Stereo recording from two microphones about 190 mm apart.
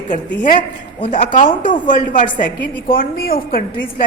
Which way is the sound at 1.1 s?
40° left (ahead or behind).